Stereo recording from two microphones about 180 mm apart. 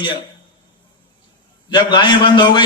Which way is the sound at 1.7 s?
25° left (ahead or behind).